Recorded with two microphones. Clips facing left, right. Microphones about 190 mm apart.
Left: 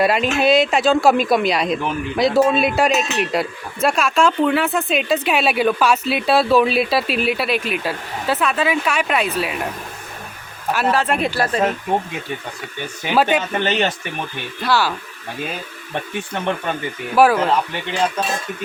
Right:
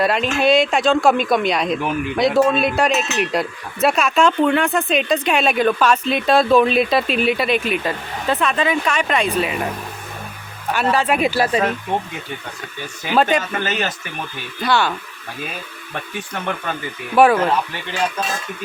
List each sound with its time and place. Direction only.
0.0 s speech: 5° left (ahead or behind)
10.7 s speech: centre (ahead or behind)
13.3 s speech: 5° left (ahead or behind)
13.7 s speech: 30° left (ahead or behind)
14.6 s speech: centre (ahead or behind)
17.2 s speech: centre (ahead or behind)